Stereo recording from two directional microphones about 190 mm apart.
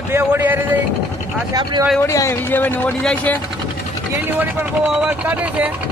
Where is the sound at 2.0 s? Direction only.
15° left (ahead or behind).